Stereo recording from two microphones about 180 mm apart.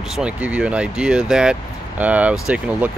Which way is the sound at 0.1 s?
5° right (ahead or behind).